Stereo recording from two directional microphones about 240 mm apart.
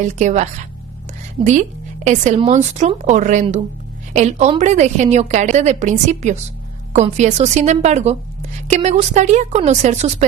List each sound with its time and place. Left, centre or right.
0.0 s a woman's voice: right
2.0 s a woman's voice: right